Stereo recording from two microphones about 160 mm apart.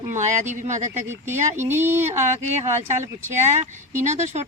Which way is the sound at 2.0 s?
45° right (ahead or behind).